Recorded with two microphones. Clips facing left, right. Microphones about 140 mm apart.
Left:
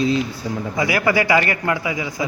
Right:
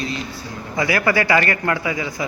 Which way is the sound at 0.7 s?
15° left (ahead or behind).